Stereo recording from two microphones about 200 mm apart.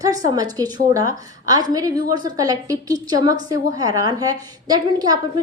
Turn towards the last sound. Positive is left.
turn(degrees=-20)  # may be behind; listen again after turning